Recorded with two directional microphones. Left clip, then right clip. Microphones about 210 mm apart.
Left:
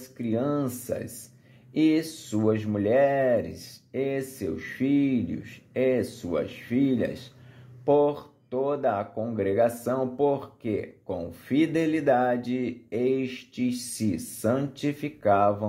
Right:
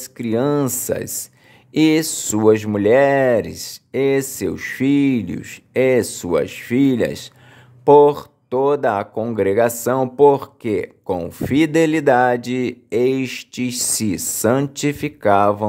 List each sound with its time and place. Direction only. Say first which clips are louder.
0.2 s speech: right 9 dB; 40° right (ahead or behind)